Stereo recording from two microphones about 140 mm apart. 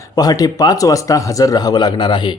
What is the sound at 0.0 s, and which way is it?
Speech, 25° left (ahead or behind).